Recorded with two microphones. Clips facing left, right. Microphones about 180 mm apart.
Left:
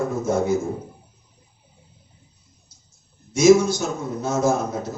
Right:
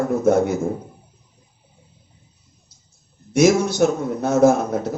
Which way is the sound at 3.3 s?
60° right (ahead or behind).